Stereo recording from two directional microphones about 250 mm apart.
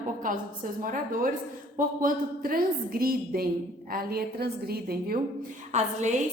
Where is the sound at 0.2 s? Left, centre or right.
Right.